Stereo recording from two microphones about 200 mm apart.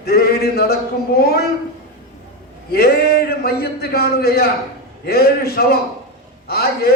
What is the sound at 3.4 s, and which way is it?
Speech, 50° left (ahead or behind).